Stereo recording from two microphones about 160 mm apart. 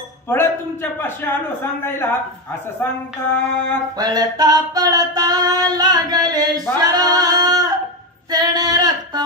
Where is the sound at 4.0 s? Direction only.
25° right (ahead or behind).